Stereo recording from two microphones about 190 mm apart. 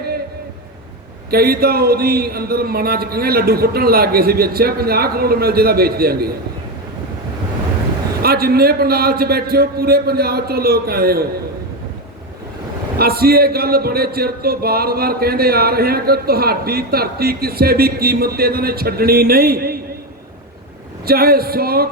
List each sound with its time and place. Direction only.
1.3 s speech: 55° right (ahead or behind)
8.2 s speech: 55° right (ahead or behind)
13.0 s speech: 55° right (ahead or behind)
21.1 s speech: 55° right (ahead or behind)